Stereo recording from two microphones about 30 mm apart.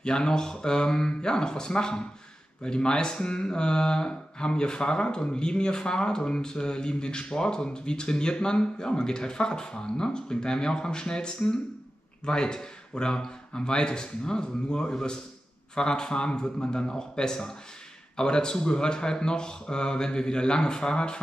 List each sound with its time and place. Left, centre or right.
0.0 s speech: left